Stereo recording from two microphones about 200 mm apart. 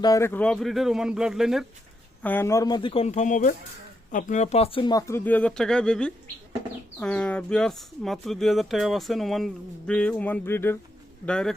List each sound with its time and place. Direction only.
0.0 s speech: 15° left (ahead or behind); by 1.6 s centre (ahead or behind)
2.2 s speech: 10° left (ahead or behind)